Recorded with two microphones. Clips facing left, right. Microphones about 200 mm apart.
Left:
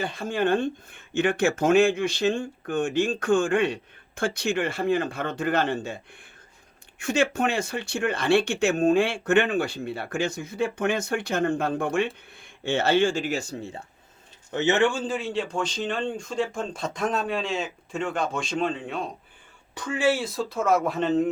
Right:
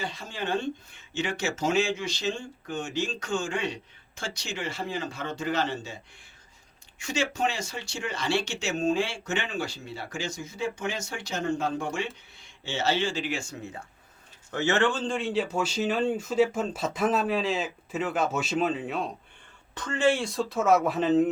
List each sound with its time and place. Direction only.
0.0 s speech: 55° left (ahead or behind)
7.0 s speech: 55° left (ahead or behind); by 13.8 s 30° left (ahead or behind)
14.5 s speech: 20° left (ahead or behind); by 19.1 s centre (ahead or behind)
19.7 s speech: 10° left (ahead or behind)